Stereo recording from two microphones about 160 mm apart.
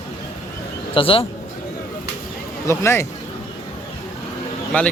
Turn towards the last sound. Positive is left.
turn(degrees=10)  # may be behind; listen again after turning